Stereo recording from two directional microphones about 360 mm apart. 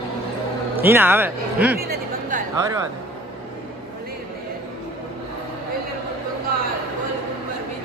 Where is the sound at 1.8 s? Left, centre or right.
Right.